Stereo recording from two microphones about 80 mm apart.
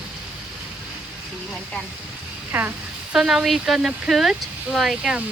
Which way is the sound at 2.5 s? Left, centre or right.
Right.